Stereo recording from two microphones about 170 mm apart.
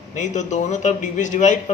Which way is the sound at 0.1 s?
45° left (ahead or behind).